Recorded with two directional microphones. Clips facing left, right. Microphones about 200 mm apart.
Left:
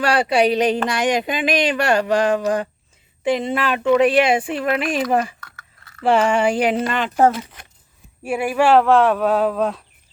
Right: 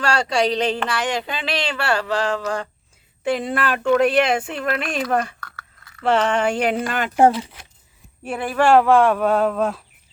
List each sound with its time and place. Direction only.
0.0 s speech: 15° left (ahead or behind)
3.3 s speech: centre (ahead or behind)
8.2 s speech: 10° left (ahead or behind)